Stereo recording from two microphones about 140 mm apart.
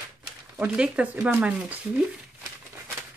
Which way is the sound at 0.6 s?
5° right (ahead or behind).